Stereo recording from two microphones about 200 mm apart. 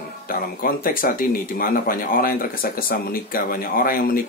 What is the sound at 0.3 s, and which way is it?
Speech, 45° left (ahead or behind).